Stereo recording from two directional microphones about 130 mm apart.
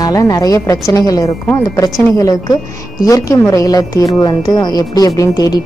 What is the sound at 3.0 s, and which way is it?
Speech, 25° left (ahead or behind).